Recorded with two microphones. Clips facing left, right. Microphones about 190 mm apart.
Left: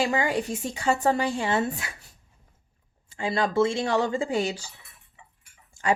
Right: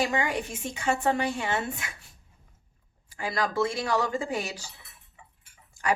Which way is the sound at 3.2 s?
25° left (ahead or behind).